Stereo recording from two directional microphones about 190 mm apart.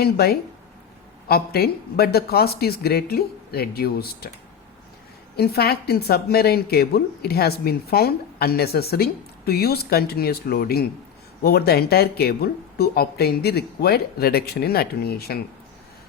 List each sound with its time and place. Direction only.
0.0 s a woman's voice: 55° left (ahead or behind)
5.4 s a woman's voice: 55° left (ahead or behind)